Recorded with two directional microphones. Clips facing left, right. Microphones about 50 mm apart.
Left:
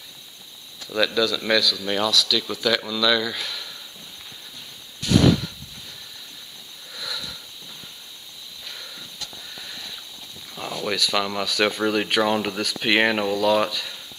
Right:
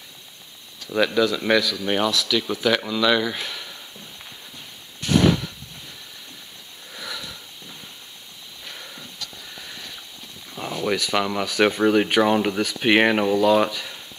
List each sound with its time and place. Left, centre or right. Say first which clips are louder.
0.8 s speech: right 2 dB; right
5.0 s a sound: even; right
6.9 s sniff: even; right
8.6 s a sound: right 1 dB; right
9.6 s sniff: even; centre
10.5 s speech: right 3 dB; centre